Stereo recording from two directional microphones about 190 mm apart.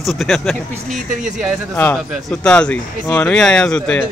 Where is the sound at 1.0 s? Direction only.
40° right (ahead or behind).